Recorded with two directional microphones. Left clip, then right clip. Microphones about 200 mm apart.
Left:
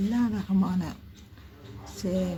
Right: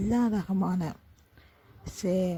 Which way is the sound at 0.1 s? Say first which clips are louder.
Even; 45° right (ahead or behind).